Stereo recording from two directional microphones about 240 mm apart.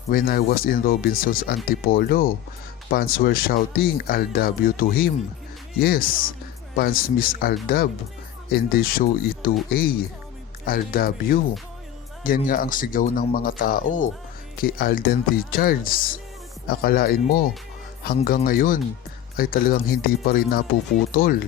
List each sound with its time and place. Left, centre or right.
0.1 s speech: left